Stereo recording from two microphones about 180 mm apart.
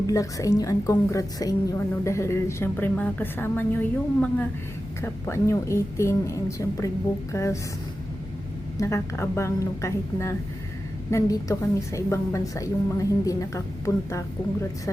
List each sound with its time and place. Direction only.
0.1 s a woman's voice: 20° left (ahead or behind)
8.8 s a woman's voice: 15° left (ahead or behind)